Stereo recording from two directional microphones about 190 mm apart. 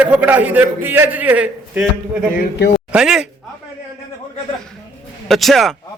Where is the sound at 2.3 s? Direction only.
50° left (ahead or behind).